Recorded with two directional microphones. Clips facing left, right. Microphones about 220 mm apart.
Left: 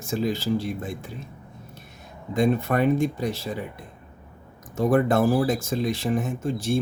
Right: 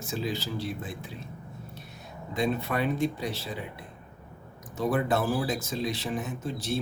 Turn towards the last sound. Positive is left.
turn(degrees=50)  # may be behind; listen again after turning